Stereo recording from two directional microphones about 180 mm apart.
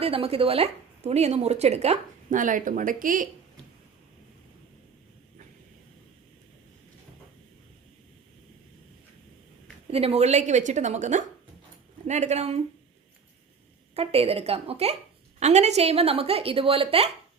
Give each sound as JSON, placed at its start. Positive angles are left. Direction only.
{"t": 0.0, "sound": "a woman's voice", "side_deg": -30}
{"t": 9.8, "sound": "a woman's voice", "side_deg": -35}
{"t": 13.9, "sound": "a woman's voice", "side_deg": -35}